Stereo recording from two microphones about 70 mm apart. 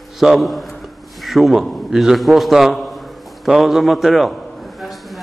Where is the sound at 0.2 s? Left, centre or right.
Centre.